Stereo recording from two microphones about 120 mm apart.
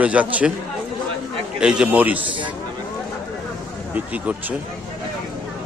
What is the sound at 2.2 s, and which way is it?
Speech, 45° right (ahead or behind).